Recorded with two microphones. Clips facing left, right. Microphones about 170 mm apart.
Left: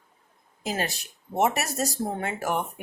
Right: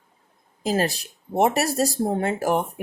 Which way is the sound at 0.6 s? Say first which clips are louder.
Right 7 dB; 35° right (ahead or behind).